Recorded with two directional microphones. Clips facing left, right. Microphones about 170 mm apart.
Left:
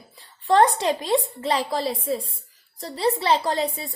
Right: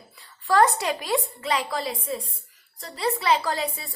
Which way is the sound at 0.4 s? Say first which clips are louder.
Left 2 dB; 25° left (ahead or behind).